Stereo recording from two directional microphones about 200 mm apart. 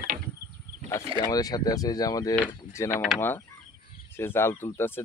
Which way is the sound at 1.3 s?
20° left (ahead or behind).